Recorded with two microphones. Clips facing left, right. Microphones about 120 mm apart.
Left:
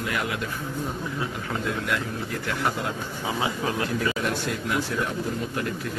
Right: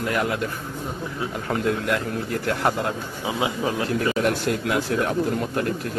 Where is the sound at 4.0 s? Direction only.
55° right (ahead or behind).